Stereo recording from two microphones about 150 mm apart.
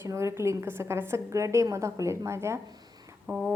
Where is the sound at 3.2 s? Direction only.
5° right (ahead or behind).